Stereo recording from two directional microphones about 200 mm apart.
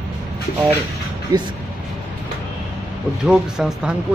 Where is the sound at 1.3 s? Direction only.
20° right (ahead or behind).